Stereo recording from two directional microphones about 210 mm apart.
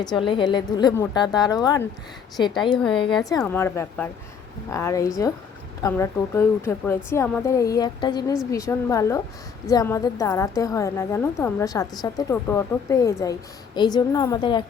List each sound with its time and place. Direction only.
0.2 s a woman's voice: 20° left (ahead or behind)
3.2 s a woman's voice: 15° left (ahead or behind)